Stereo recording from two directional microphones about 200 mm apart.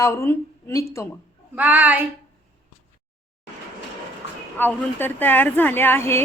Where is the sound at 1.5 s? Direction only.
10° right (ahead or behind).